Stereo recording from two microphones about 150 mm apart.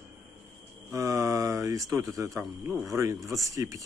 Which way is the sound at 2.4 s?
Centre (ahead or behind).